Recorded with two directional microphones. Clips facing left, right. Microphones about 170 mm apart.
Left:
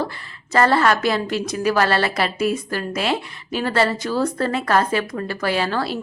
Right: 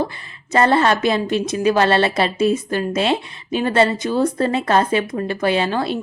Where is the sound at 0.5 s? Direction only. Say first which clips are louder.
Right 1 dB; 20° right (ahead or behind).